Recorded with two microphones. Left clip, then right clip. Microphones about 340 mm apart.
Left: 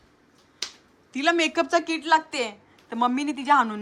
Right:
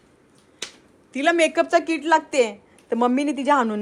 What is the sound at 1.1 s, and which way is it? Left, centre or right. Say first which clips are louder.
A woman's voice: right 4 dB; centre.